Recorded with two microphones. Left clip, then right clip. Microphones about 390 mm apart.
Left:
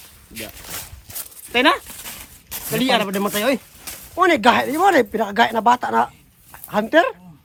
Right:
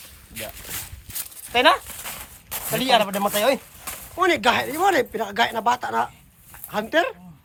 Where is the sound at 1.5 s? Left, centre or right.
Centre.